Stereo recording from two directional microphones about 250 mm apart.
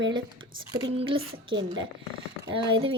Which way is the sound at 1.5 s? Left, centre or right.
Right.